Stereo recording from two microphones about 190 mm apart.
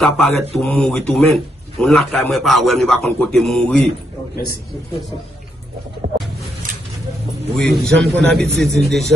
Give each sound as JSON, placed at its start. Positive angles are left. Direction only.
{"t": 0.0, "sound": "a man's voice", "side_deg": 0}
{"t": 7.5, "sound": "a man's voice", "side_deg": 5}